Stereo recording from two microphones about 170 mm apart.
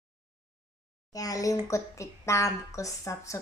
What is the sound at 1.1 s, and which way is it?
A woman's voice, 20° left (ahead or behind).